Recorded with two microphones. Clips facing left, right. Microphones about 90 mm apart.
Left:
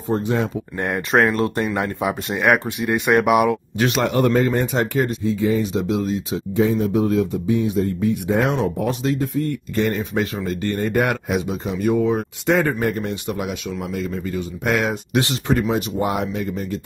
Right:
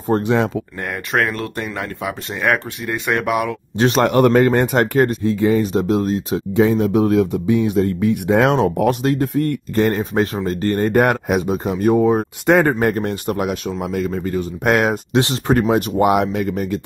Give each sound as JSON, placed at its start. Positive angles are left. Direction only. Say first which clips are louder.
{"t": 0.1, "sound": "speech", "louder": "right 4 dB", "side_deg": -90}
{"t": 0.7, "sound": "speech", "louder": "left 4 dB", "side_deg": 25}
{"t": 3.7, "sound": "a man's voice", "louder": "right 4 dB", "side_deg": -35}
{"t": 4.0, "sound": "speech", "louder": "right 5 dB", "side_deg": -65}
{"t": 5.7, "sound": "speech", "louder": "right 4 dB", "side_deg": -45}
{"t": 6.5, "sound": "speech", "louder": "right 3 dB", "side_deg": -90}
{"t": 8.5, "sound": "speech", "louder": "right 5 dB", "side_deg": -60}
{"t": 9.8, "sound": "speech", "louder": "right 4 dB", "side_deg": -45}
{"t": 12.4, "sound": "speech", "louder": "right 4 dB", "side_deg": -60}